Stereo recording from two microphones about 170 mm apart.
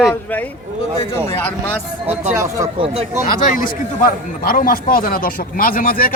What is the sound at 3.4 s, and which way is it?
A man's voice, 55° left (ahead or behind).